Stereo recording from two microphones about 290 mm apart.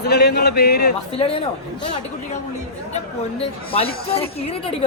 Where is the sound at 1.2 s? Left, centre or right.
Centre.